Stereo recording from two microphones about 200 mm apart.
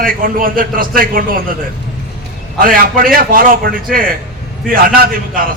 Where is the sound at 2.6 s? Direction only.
45° right (ahead or behind).